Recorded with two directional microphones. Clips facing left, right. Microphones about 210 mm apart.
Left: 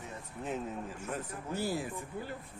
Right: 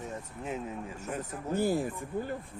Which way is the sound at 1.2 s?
50° right (ahead or behind).